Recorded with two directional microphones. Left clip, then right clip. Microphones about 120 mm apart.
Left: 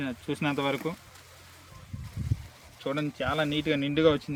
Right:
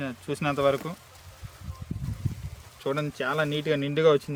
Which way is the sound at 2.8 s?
85° right.